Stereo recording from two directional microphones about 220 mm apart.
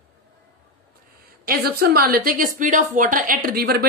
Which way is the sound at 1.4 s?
45° right (ahead or behind).